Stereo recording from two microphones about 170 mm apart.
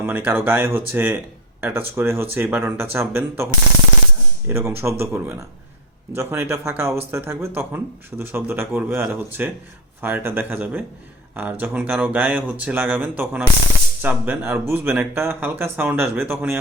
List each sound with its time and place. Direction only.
0.0 s speech: 15° right (ahead or behind)